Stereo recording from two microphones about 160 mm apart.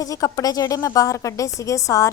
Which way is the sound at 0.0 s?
20° left (ahead or behind).